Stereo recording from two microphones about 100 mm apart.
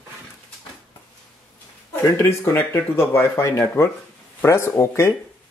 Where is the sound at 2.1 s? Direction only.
25° left (ahead or behind).